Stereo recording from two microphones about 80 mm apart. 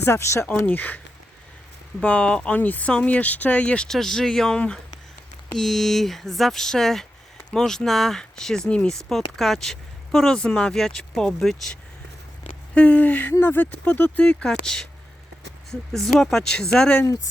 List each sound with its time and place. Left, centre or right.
0.0 s speech: left
0.6 s speech: left
2.0 s speech: centre
15.9 s speech: centre